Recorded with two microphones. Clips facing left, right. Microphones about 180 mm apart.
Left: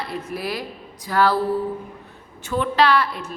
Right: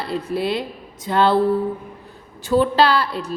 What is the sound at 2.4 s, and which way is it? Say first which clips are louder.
Speech: right 3 dB; 30° right (ahead or behind).